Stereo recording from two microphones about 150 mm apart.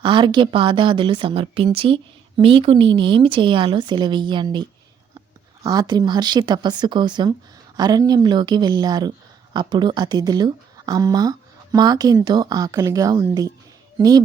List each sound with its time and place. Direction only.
0.0 s a woman's voice: 35° right (ahead or behind)
5.6 s a woman's voice: 25° right (ahead or behind)